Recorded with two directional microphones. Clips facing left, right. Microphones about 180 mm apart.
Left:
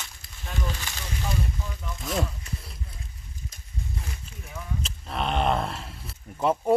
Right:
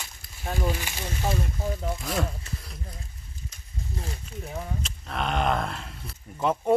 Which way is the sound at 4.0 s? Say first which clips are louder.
Right 4 dB; 35° right (ahead or behind).